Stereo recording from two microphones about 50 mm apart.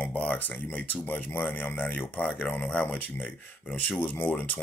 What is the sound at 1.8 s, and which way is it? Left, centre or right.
Speech, left.